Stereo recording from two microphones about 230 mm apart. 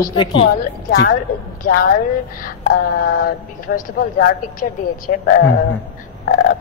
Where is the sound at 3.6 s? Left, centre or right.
Left.